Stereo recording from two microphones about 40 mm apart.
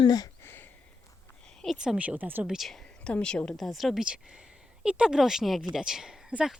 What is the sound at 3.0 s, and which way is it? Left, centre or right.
Speech, left.